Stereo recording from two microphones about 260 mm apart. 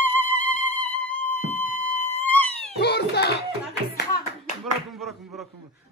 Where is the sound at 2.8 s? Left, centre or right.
Left.